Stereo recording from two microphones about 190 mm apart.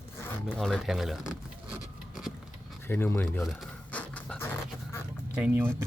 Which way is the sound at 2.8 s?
10° left (ahead or behind).